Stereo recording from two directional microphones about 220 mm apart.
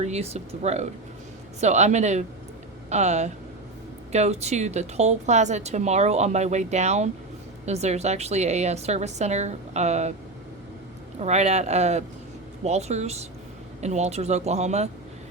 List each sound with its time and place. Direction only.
0.0 s a woman's voice: 30° right (ahead or behind)
11.2 s speech: 30° right (ahead or behind)